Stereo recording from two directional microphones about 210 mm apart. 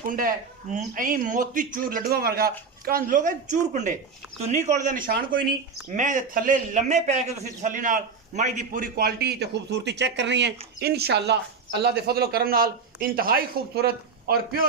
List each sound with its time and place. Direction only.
0.1 s speech: 40° right (ahead or behind)